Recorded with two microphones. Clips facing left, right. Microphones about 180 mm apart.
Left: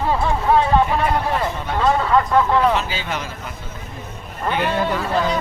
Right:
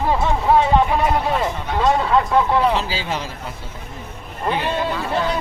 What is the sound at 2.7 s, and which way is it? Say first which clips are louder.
Speech: even; 30° right (ahead or behind).